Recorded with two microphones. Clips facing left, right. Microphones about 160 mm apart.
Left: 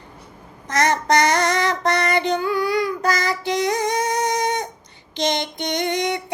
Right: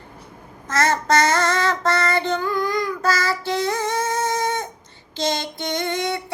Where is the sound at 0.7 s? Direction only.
15° left (ahead or behind).